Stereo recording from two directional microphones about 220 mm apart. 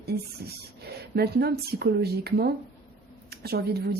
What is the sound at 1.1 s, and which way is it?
Speech, 45° right (ahead or behind).